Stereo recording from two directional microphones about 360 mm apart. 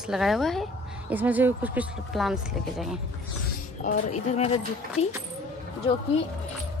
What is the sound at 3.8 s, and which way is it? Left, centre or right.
Speech, left.